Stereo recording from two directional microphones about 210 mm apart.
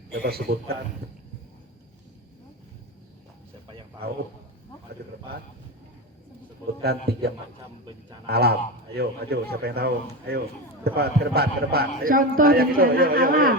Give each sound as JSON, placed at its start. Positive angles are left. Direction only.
{"t": 0.1, "sound": "a man's voice", "side_deg": -45}
{"t": 6.8, "sound": "a man's voice", "side_deg": -50}